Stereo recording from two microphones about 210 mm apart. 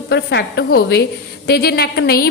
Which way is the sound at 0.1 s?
55° left (ahead or behind).